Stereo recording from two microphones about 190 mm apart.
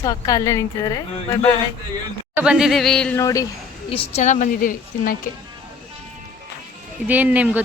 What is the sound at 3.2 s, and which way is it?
Speech, 20° left (ahead or behind).